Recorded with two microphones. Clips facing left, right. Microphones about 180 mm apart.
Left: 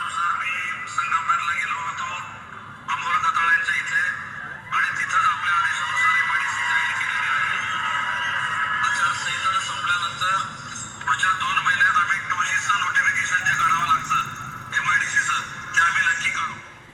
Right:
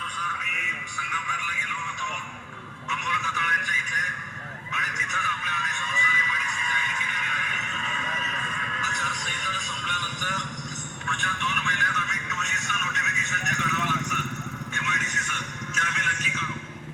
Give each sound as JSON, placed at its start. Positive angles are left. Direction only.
{"t": 1.1, "sound": "music", "side_deg": -15}
{"t": 3.1, "sound": "a sound", "side_deg": -15}
{"t": 8.8, "sound": "music", "side_deg": -15}